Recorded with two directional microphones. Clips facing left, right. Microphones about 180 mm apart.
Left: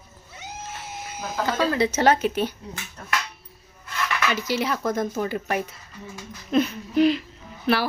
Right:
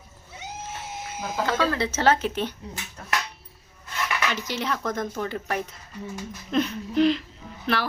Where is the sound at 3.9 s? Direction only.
15° right (ahead or behind).